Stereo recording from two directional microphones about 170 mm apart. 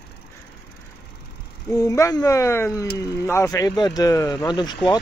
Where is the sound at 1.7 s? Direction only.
20° left (ahead or behind).